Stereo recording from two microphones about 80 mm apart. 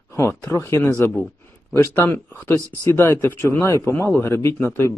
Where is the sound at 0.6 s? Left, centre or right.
Left.